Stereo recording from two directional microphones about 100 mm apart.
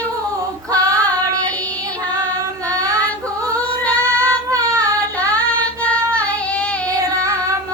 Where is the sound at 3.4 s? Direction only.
35° right (ahead or behind).